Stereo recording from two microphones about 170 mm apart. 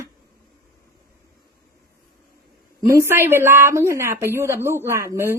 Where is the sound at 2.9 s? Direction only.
15° right (ahead or behind).